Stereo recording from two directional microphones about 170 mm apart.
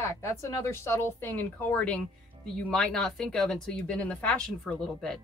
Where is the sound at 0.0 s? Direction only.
15° left (ahead or behind).